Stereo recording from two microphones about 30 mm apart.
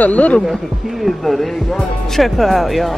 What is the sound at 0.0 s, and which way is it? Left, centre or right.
Speech, left.